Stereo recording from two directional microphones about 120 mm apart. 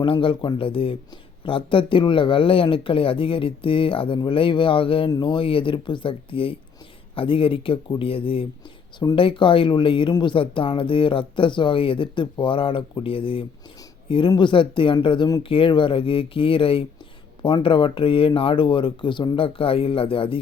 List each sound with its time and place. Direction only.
0.0 s speech: 45° left (ahead or behind)